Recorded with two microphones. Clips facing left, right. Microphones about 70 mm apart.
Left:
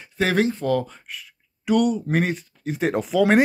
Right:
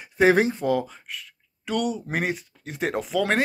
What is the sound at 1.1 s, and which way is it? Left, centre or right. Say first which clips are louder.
Speech: even; centre.